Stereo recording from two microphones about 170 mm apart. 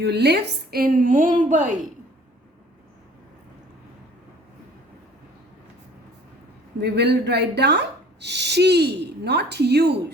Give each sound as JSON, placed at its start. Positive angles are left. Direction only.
{"t": 0.0, "sound": "a woman's voice", "side_deg": -75}
{"t": 6.7, "sound": "speech", "side_deg": -75}